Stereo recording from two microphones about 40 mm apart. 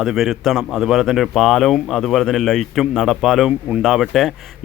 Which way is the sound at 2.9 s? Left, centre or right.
Centre.